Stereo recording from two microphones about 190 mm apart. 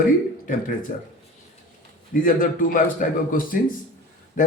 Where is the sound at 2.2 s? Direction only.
45° left (ahead or behind).